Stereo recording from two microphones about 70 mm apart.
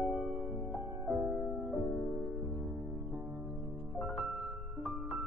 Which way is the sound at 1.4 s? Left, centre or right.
Centre.